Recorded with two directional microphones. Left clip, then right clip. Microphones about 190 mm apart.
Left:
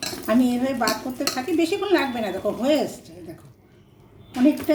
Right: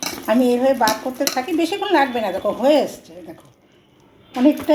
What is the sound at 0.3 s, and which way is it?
A woman's voice, 20° left (ahead or behind).